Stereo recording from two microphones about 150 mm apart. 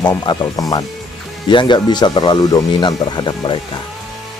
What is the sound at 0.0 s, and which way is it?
Speech, 30° left (ahead or behind).